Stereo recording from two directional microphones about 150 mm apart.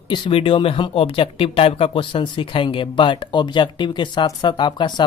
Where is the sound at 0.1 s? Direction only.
35° left (ahead or behind).